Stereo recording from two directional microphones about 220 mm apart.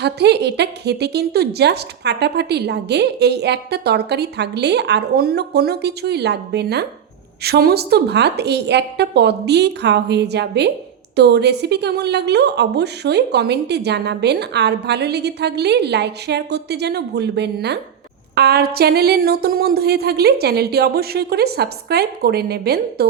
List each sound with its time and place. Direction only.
0.0 s a woman's voice: 50° right (ahead or behind)